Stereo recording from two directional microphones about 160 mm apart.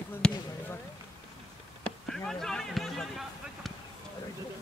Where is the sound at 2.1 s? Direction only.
5° left (ahead or behind).